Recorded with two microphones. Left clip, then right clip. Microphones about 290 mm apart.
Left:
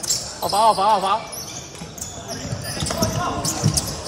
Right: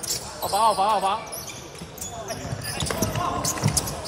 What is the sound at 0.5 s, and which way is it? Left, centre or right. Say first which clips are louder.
Speech: left 4 dB; left.